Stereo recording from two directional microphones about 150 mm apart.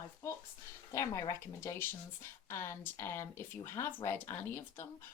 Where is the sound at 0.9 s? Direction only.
20° left (ahead or behind).